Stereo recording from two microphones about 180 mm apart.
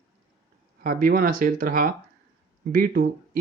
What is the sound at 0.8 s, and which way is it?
Speech, 50° right (ahead or behind).